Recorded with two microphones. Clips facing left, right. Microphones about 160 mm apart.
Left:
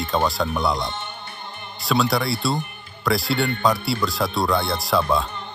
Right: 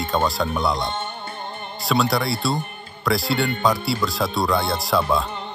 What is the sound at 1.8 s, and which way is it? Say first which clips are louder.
Speech: even; centre (ahead or behind).